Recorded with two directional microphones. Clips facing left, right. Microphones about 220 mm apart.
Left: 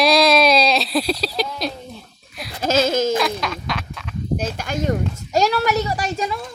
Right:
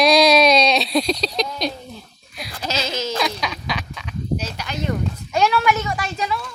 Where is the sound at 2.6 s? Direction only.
50° left (ahead or behind).